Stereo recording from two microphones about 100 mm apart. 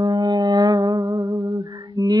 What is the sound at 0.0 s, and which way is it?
Music, 40° right (ahead or behind).